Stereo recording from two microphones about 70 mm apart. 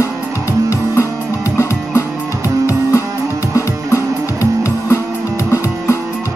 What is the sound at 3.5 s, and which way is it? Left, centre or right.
Music, left.